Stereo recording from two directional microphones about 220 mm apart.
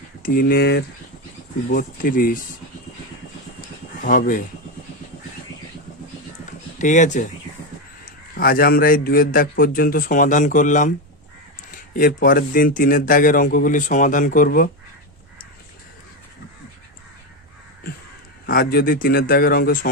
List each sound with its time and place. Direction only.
0.2 s speech: 40° left (ahead or behind)
4.0 s speech: 40° left (ahead or behind)
6.7 s speech: 35° left (ahead or behind)
8.4 s speech: 40° left (ahead or behind)
11.9 s speech: 40° left (ahead or behind)
18.4 s speech: 40° left (ahead or behind)